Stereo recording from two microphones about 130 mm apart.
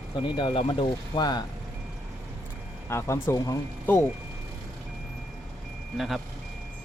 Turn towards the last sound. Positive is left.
turn(degrees=0)  # may be behind; listen again after turning